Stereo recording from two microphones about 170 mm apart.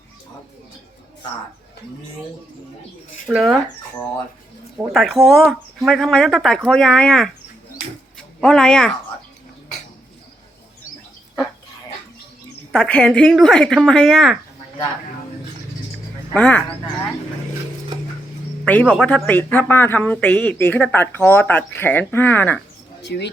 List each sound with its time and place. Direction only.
3.2 s speech: centre (ahead or behind)
4.9 s speech: centre (ahead or behind)
8.4 s speech: 5° left (ahead or behind)
12.7 s speech: 5° left (ahead or behind)
16.3 s speech: 10° left (ahead or behind)
18.6 s a man's voice: 10° left (ahead or behind)
23.0 s speech: 85° left